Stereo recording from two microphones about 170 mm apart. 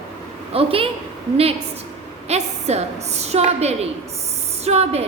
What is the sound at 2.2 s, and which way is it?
A woman's voice, 40° right (ahead or behind).